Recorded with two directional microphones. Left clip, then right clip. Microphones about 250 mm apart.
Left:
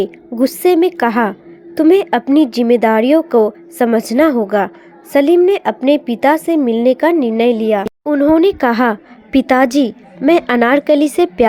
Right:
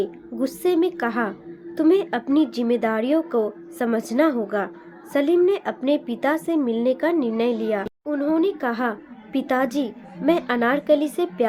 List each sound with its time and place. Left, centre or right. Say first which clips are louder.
0.0 s a woman's voice: left 9 dB; left